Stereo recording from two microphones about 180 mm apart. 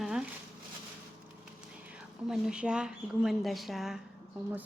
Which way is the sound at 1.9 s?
5° right (ahead or behind).